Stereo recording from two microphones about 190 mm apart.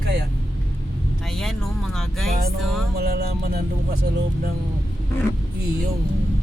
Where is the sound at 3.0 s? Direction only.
55° right (ahead or behind).